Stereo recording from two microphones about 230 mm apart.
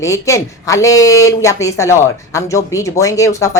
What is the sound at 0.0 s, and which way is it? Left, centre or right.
Speech, centre.